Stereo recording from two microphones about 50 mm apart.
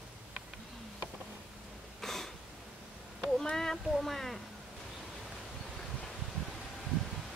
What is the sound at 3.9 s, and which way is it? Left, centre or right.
Speech, centre.